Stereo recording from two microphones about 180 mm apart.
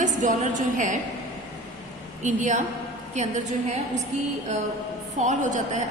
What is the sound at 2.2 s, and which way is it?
A woman's voice, 45° right (ahead or behind).